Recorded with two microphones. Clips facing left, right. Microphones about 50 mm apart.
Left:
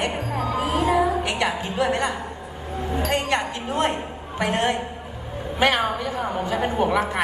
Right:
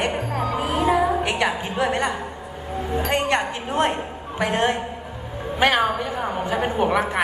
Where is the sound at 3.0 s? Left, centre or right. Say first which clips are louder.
Right 1 dB; right.